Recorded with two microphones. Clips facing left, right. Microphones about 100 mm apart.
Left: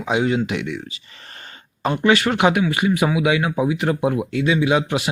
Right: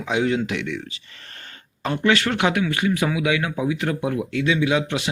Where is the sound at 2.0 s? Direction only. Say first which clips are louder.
Left 3 dB; 20° left (ahead or behind).